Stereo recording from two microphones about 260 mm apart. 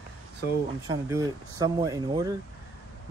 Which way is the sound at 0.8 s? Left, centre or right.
Centre.